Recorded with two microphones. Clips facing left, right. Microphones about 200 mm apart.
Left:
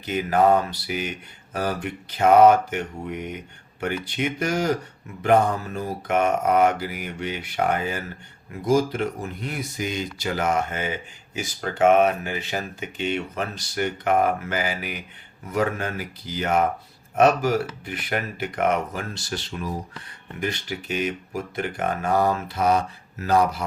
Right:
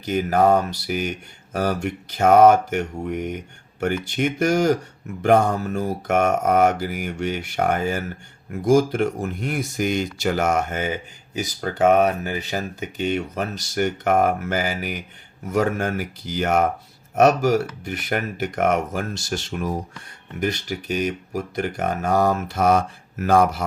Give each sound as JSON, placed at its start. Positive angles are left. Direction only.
{"t": 0.0, "sound": "speech", "side_deg": -45}